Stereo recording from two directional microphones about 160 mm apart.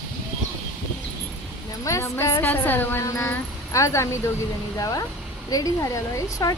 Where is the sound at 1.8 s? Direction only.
15° left (ahead or behind).